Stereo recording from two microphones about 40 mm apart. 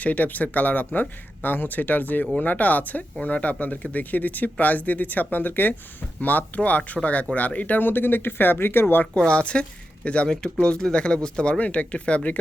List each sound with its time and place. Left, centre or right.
0.0 s speech: left
7.8 s speech: left
9.1 s speech: left
11.6 s speech: left